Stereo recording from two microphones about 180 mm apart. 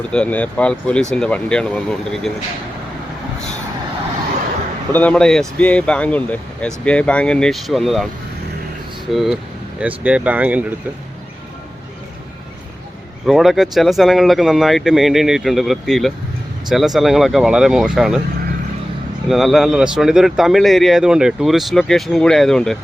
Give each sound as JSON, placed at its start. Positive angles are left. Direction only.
{"t": 0.1, "sound": "speech", "side_deg": 5}
{"t": 4.9, "sound": "speech", "side_deg": 10}
{"t": 9.1, "sound": "speech", "side_deg": 0}
{"t": 13.2, "sound": "speech", "side_deg": 0}
{"t": 19.3, "sound": "speech", "side_deg": 0}